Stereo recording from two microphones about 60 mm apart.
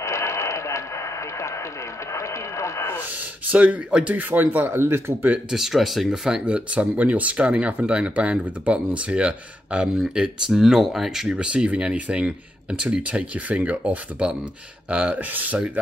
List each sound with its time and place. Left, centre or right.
0.0 s radio: left
3.4 s speech: right
5.5 s speech: centre
6.2 s speech: centre
10.6 s speech: centre; by 15.6 s right